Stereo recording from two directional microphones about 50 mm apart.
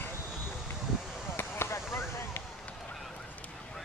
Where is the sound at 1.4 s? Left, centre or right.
Left.